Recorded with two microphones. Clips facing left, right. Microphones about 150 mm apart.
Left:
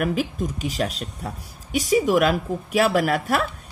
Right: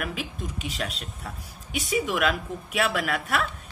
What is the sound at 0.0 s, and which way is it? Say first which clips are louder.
Speech: left 9 dB; 40° left (ahead or behind).